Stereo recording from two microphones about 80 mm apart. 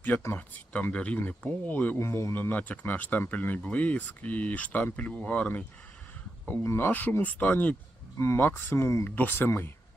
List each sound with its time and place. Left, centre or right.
0.3 s speech: centre
2.0 s speech: left
6.7 s speech: left
9.0 s speech: left